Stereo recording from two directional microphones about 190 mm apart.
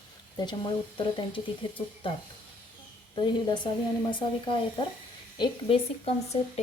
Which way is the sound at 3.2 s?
25° left (ahead or behind).